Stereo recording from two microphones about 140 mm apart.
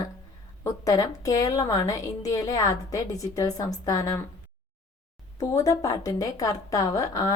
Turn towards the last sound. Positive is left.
turn(degrees=25)  # may be behind; listen again after turning